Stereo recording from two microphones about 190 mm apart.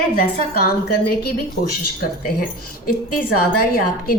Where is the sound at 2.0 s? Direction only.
50° left (ahead or behind).